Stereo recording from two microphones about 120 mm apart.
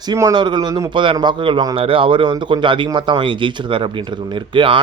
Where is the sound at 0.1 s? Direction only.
30° right (ahead or behind).